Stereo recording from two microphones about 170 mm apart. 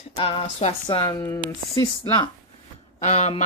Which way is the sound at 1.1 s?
15° left (ahead or behind).